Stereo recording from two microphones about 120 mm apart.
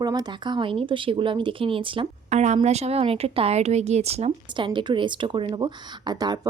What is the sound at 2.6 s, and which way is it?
Speech, 65° right (ahead or behind).